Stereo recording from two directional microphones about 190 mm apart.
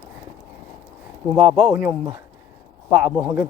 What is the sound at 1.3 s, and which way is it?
Speech, 5° right (ahead or behind).